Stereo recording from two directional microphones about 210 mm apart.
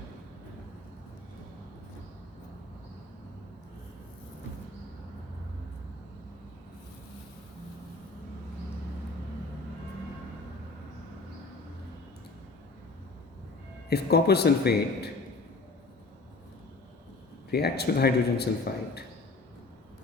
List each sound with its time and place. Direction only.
13.9 s a man's voice: 50° left (ahead or behind)
17.5 s a man's voice: 50° left (ahead or behind)